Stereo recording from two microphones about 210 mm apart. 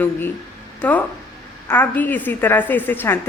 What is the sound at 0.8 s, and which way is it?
A woman's voice, 5° left (ahead or behind).